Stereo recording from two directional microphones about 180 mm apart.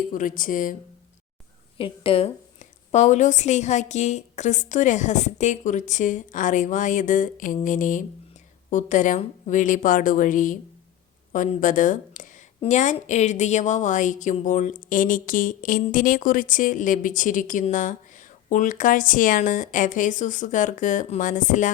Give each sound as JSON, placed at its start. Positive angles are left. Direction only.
{"t": 0.1, "sound": "a woman's voice", "side_deg": 45}
{"t": 1.8, "sound": "a woman's voice", "side_deg": 30}